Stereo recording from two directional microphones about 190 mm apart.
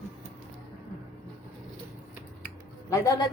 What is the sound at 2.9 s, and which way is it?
Speech, 20° left (ahead or behind).